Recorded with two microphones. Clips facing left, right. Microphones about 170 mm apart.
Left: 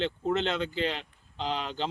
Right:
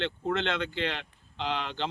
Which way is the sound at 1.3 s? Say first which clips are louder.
Even; 35° left (ahead or behind).